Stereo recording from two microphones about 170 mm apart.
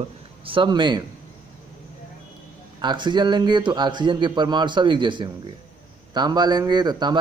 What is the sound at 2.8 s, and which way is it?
A man's voice, 25° right (ahead or behind).